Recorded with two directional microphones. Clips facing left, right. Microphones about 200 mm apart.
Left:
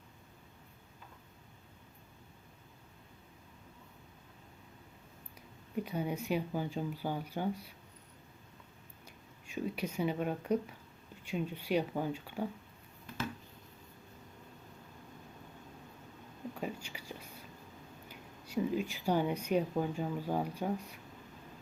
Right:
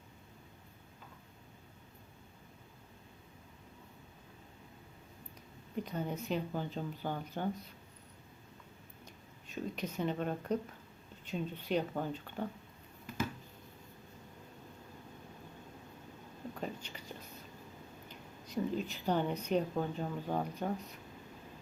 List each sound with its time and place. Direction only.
5.7 s speech: 10° left (ahead or behind)
9.0 s speech: 10° left (ahead or behind)
16.6 s whispering: 10° left (ahead or behind)
18.1 s speech: 10° left (ahead or behind)